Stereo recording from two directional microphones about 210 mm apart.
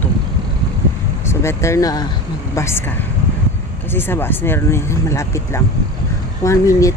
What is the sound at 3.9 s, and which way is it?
Speech, 10° left (ahead or behind).